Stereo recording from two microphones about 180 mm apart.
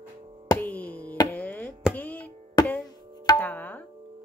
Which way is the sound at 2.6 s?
25° left (ahead or behind).